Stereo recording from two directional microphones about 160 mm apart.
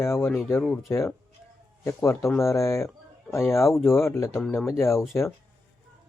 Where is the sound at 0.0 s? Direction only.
15° left (ahead or behind).